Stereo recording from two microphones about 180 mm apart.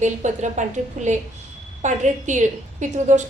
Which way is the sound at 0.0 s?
40° right (ahead or behind).